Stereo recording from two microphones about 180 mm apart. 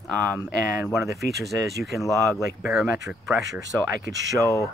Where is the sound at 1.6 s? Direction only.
Centre (ahead or behind).